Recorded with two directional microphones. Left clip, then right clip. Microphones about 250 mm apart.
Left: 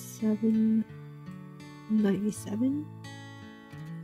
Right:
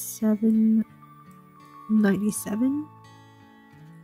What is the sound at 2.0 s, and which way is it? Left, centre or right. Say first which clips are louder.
Speech: right 4 dB; centre.